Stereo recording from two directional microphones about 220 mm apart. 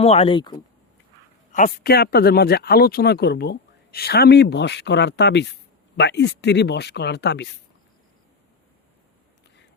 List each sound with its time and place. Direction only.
0.0 s speech: 25° left (ahead or behind)
1.5 s speech: 40° left (ahead or behind)